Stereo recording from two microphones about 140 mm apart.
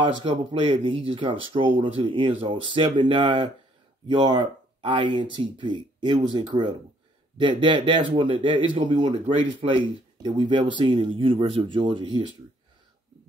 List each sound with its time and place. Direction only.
0.0 s speech: 35° right (ahead or behind)